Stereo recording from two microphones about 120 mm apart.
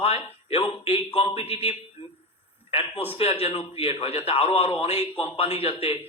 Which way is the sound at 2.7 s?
55° left (ahead or behind).